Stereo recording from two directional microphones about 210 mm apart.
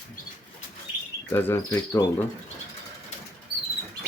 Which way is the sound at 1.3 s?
10° left (ahead or behind).